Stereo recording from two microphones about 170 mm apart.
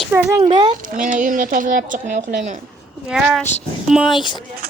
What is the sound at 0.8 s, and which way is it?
Speech, 50° right (ahead or behind).